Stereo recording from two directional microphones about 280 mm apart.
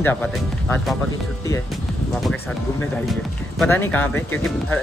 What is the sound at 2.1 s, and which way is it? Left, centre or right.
Speech, centre.